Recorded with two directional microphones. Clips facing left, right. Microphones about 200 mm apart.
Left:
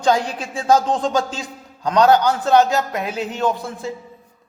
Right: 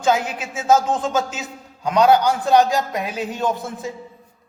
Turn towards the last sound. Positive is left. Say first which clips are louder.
# left 1 dB
turn(degrees=-15)  # may be behind; listen again after turning